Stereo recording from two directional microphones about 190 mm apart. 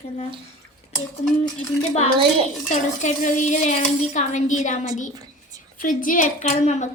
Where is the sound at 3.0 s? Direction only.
40° left (ahead or behind).